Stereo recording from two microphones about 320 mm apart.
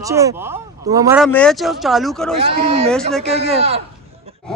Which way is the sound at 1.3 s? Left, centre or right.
Centre.